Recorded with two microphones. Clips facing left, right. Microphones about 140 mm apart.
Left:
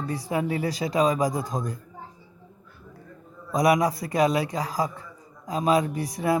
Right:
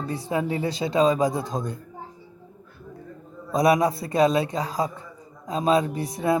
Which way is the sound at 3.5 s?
25° right (ahead or behind).